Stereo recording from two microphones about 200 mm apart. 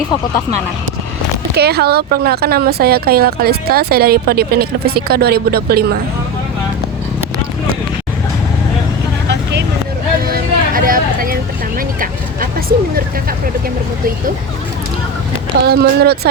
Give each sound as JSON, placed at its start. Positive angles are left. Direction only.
{"t": 1.5, "sound": "speech", "side_deg": -50}
{"t": 9.3, "sound": "vehicle", "side_deg": -60}
{"t": 10.2, "sound": "vehicle", "side_deg": -45}
{"t": 15.6, "sound": "speech", "side_deg": -55}